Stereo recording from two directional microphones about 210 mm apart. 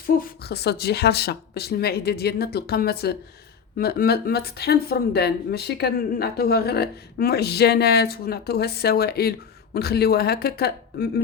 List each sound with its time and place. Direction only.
0.2 s speech: 45° left (ahead or behind)